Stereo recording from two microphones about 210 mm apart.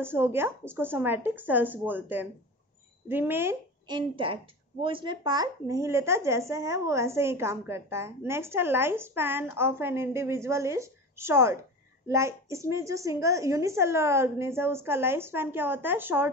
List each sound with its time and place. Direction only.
0.0 s speech: 10° right (ahead or behind)
3.8 s a woman's voice: 25° right (ahead or behind)